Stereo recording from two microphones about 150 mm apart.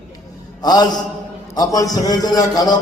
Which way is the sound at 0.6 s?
25° left (ahead or behind).